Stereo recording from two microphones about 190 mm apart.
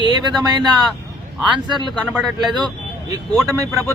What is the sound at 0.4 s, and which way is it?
Speech, 20° right (ahead or behind).